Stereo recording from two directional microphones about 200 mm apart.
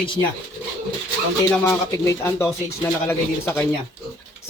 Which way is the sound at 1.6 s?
15° left (ahead or behind).